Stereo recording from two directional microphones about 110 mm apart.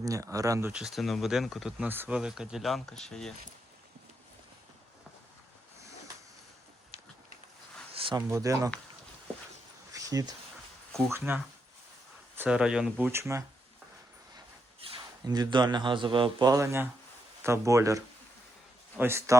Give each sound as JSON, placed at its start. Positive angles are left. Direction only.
{"t": 0.0, "sound": "speech", "side_deg": -30}
{"t": 0.7, "sound": "speech", "side_deg": -5}
{"t": 1.8, "sound": "speech", "side_deg": -15}
{"t": 8.1, "sound": "speech", "side_deg": -30}
{"t": 9.9, "sound": "a sound", "side_deg": -35}
{"t": 11.1, "sound": "speech", "side_deg": -20}
{"t": 12.5, "sound": "speech", "side_deg": -5}
{"t": 13.1, "sound": "speech", "side_deg": -25}
{"t": 14.8, "sound": "a sound", "side_deg": -60}
{"t": 15.2, "sound": "a man's voice", "side_deg": -35}
{"t": 16.5, "sound": "speech", "side_deg": -30}